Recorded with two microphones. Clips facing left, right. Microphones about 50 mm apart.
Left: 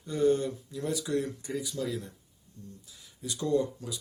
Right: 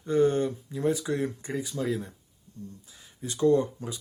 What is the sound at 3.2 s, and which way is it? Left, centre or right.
Speech, right.